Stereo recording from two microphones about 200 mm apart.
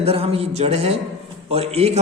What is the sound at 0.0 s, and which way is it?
Speech, 30° right (ahead or behind).